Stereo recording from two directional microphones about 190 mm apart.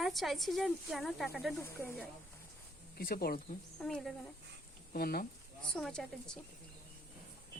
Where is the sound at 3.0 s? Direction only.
50° left (ahead or behind).